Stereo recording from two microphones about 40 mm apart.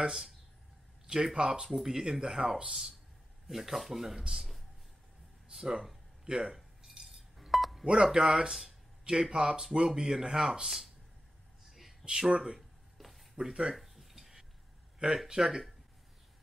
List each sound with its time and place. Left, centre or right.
0.0 s speech: centre
5.5 s cutlery: centre
7.8 s speech: right
8.6 s a sound: right
9.3 s speech: right
9.6 s speech: centre
12.0 s speech: right
12.5 s a sound: centre
13.5 s speech: centre
13.7 s a sound: centre
15.2 s speech: right